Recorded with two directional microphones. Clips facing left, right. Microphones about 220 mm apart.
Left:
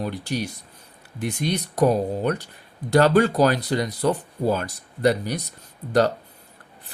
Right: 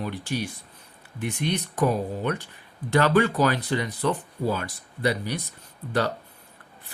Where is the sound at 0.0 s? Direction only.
40° left (ahead or behind).